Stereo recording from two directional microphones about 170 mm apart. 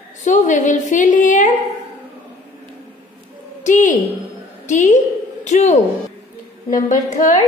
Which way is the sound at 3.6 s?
45° left (ahead or behind).